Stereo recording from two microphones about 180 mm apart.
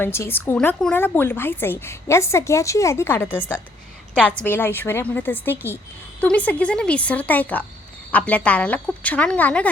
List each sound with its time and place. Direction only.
0.0 s a woman's voice: 15° left (ahead or behind)